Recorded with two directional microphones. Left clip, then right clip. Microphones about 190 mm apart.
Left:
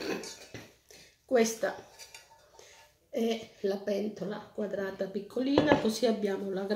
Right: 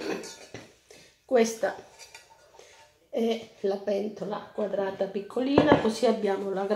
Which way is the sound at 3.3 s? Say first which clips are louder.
Right 3 dB; 50° left (ahead or behind).